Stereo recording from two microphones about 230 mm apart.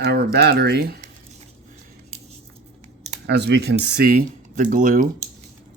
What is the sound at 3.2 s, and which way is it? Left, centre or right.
Speech, right.